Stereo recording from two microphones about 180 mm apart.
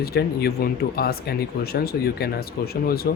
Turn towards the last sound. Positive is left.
turn(degrees=55)  # may be behind; listen again after turning